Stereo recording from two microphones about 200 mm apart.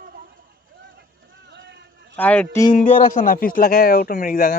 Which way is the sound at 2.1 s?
5° left (ahead or behind).